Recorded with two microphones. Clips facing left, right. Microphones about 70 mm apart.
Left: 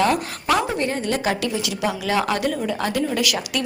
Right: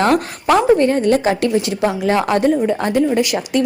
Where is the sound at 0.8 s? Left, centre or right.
Right.